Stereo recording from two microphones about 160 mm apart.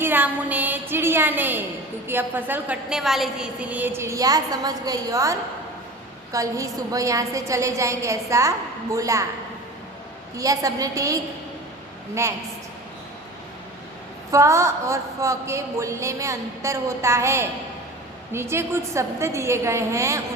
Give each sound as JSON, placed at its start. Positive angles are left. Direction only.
{"t": 0.0, "sound": "a woman's voice", "side_deg": -10}
{"t": 10.3, "sound": "a woman's voice", "side_deg": -20}
{"t": 14.3, "sound": "a woman's voice", "side_deg": -20}